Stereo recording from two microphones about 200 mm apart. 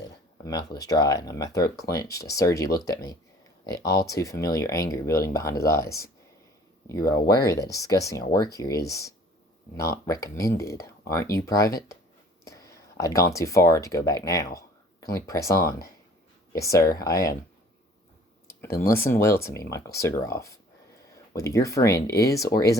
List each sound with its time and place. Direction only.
0.4 s speech: 20° left (ahead or behind)
18.4 s speech: 15° left (ahead or behind)